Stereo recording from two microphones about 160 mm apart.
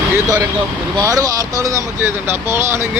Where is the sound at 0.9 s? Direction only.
20° right (ahead or behind).